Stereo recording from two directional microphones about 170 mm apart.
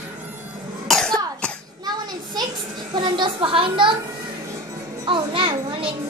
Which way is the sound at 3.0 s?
25° right (ahead or behind).